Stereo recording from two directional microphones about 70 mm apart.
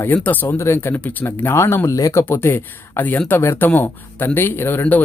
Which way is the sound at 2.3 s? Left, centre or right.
Left.